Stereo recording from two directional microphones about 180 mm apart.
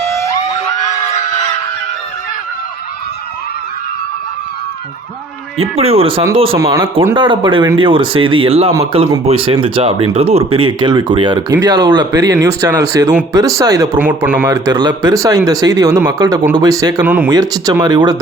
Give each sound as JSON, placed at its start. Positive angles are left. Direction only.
{"t": 5.5, "sound": "speech", "side_deg": -35}
{"t": 6.6, "sound": "speech", "side_deg": -15}
{"t": 14.0, "sound": "speech", "side_deg": -10}
{"t": 14.7, "sound": "speech", "side_deg": -25}
{"t": 17.0, "sound": "speech", "side_deg": -5}
{"t": 17.2, "sound": "speech", "side_deg": -20}